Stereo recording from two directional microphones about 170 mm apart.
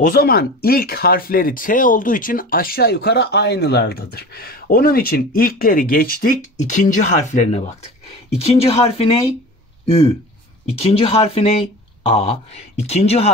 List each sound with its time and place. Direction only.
0.0 s speech: 60° left (ahead or behind); by 13.3 s 40° left (ahead or behind)